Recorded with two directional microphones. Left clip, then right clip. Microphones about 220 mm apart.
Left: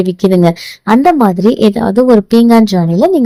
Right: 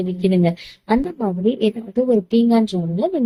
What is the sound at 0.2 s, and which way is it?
A woman's voice, 40° left (ahead or behind).